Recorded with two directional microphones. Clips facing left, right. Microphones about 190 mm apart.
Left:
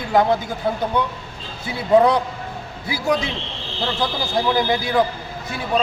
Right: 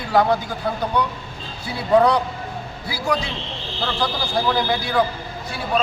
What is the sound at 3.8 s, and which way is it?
A man's voice, 20° left (ahead or behind).